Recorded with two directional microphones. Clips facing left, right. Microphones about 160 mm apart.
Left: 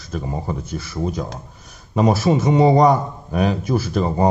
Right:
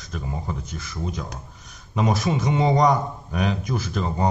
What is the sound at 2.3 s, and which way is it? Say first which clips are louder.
Speech: left 7 dB; 50° left (ahead or behind).